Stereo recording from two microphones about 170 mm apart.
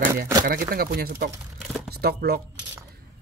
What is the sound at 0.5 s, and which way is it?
Speech, 55° right (ahead or behind).